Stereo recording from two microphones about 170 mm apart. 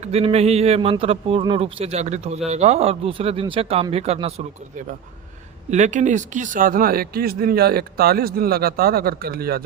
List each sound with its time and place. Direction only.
0.0 s a man's voice: 35° right (ahead or behind)
5.7 s speech: 45° right (ahead or behind); by 9.6 s 65° right (ahead or behind)